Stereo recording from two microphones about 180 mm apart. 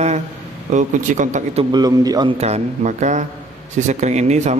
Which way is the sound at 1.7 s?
20° right (ahead or behind).